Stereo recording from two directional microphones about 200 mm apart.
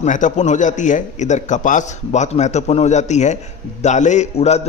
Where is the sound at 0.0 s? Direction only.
40° left (ahead or behind).